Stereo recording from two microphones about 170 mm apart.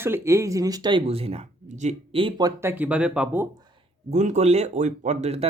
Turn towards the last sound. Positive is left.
turn(degrees=-40)  # may be behind; listen again after turning